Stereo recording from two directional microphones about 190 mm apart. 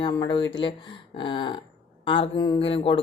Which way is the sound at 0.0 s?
20° left (ahead or behind).